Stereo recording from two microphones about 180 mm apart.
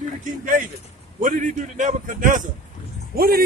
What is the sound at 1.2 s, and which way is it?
A man's voice, 45° right (ahead or behind).